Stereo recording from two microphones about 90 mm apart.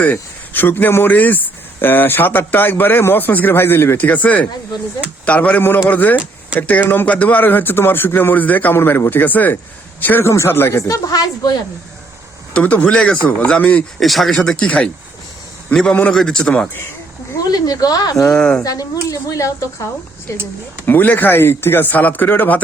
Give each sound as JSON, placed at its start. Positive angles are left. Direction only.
{"t": 0.0, "sound": "a man's voice", "side_deg": 20}
{"t": 12.5, "sound": "a man's voice", "side_deg": 15}
{"t": 14.0, "sound": "a man's voice", "side_deg": 0}
{"t": 17.4, "sound": "speech", "side_deg": 45}
{"t": 18.3, "sound": "a man's voice", "side_deg": 5}
{"t": 18.6, "sound": "speech", "side_deg": 40}
{"t": 20.8, "sound": "a man's voice", "side_deg": 20}